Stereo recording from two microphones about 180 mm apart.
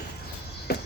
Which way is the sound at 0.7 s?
60° left (ahead or behind).